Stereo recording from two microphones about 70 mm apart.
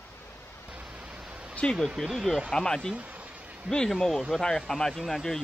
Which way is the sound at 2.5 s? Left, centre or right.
Centre.